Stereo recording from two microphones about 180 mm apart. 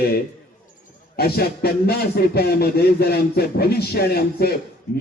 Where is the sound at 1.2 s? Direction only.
60° left (ahead or behind).